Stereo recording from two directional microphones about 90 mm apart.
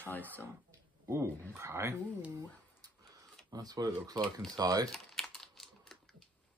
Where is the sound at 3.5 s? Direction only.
45° right (ahead or behind).